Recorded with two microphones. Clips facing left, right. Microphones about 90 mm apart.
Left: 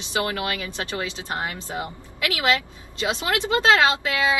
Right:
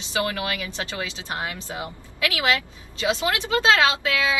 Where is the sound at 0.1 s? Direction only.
25° left (ahead or behind).